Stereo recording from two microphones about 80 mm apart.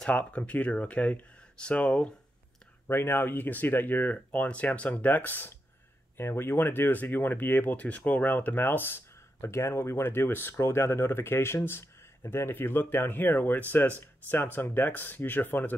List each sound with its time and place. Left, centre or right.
0.0 s speech: centre
2.9 s speech: left